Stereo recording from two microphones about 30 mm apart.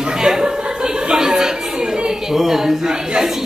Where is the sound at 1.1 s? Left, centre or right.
Right.